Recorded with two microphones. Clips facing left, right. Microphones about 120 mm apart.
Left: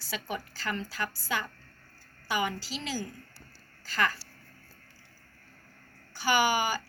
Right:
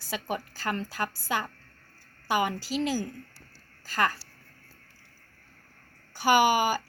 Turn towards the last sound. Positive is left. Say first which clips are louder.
# right 4 dB
turn(degrees=-50)  # may be behind; listen again after turning